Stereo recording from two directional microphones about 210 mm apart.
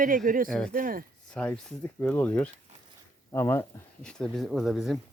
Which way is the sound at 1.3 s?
5° left (ahead or behind).